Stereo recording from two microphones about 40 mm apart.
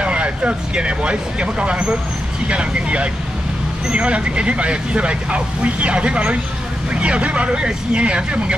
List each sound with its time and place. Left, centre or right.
0.0 s speech: right